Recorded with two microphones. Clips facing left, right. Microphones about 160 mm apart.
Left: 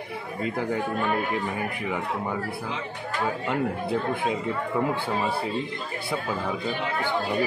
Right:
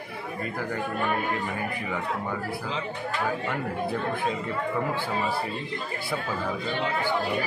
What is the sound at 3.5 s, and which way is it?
Speech, 15° left (ahead or behind).